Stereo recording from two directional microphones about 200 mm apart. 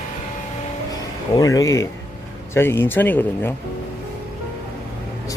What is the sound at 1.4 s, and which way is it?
Speech, 15° left (ahead or behind).